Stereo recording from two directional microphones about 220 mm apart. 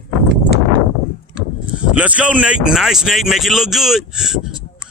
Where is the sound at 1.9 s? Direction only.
5° right (ahead or behind).